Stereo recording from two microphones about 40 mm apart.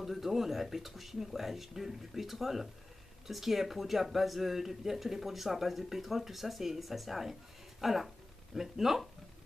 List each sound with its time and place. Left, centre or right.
0.0 s speech: centre